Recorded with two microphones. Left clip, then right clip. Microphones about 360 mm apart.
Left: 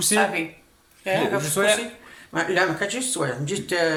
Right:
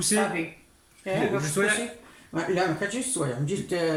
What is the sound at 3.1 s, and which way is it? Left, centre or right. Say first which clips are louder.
Speech: left 3 dB; left.